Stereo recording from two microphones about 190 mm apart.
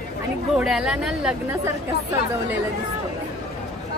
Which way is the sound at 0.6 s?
5° right (ahead or behind).